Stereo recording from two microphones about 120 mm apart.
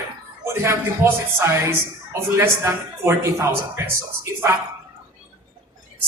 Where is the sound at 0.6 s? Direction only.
20° right (ahead or behind).